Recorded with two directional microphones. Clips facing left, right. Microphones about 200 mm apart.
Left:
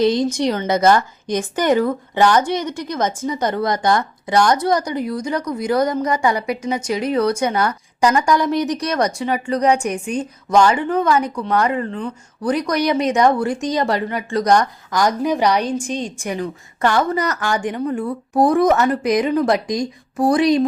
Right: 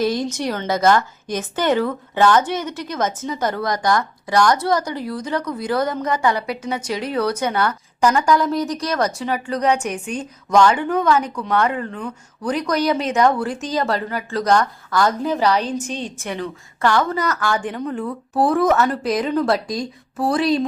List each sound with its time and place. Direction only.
0.0 s a woman's voice: 20° left (ahead or behind)
8.8 s speech: centre (ahead or behind)
9.3 s a woman's voice: 10° left (ahead or behind)